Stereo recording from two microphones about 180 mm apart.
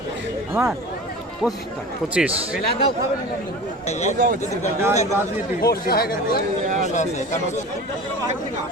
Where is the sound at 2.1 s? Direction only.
5° right (ahead or behind).